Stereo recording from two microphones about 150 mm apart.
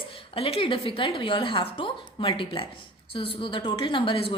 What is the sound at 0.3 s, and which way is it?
A woman's voice, 40° left (ahead or behind).